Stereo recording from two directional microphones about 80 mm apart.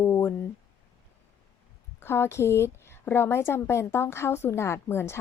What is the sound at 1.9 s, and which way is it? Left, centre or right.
A woman's voice, left.